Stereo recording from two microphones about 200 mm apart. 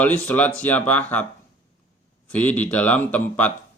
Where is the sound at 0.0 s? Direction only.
10° left (ahead or behind).